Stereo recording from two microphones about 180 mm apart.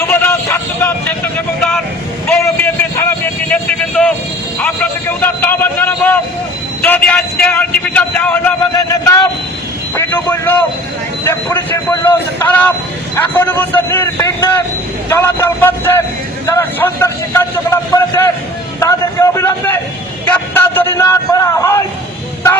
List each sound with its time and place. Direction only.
0.0 s vehicle: 15° left (ahead or behind)
3.0 s vehicle: 10° left (ahead or behind)
4.6 s a sound: 10° left (ahead or behind)
6.8 s vehicle: 10° left (ahead or behind)
8.7 s a sound: 20° left (ahead or behind)
9.9 s vehicle: 10° left (ahead or behind)
11.2 s speech: 15° left (ahead or behind)
16.5 s vehicle: 15° left (ahead or behind)
18.8 s a sound: 15° left (ahead or behind)